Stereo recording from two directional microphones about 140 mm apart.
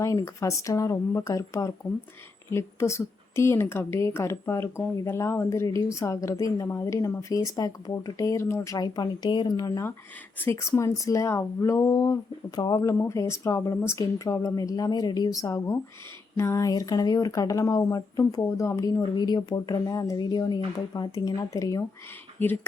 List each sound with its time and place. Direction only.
0.0 s a woman's voice: 25° left (ahead or behind)